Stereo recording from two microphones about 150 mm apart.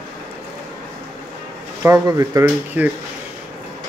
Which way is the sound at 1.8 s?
20° right (ahead or behind).